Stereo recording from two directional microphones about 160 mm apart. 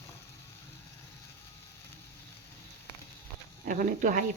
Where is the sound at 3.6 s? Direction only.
55° right (ahead or behind).